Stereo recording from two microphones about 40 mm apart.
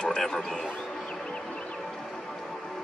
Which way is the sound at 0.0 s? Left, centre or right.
Centre.